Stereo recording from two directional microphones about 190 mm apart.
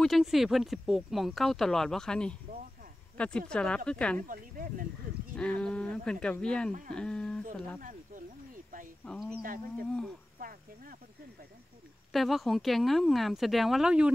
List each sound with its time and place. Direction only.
0.0 s speech: centre (ahead or behind)
4.3 s speech: 45° right (ahead or behind)
5.6 s speech: 5° left (ahead or behind)
9.0 s speech: 5° left (ahead or behind)
10.4 s cricket: 50° right (ahead or behind)
12.1 s speech: centre (ahead or behind)